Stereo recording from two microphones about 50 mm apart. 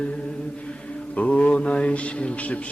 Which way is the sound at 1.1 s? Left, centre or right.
Left.